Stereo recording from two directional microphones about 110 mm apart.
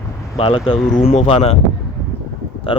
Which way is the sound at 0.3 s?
60° left (ahead or behind).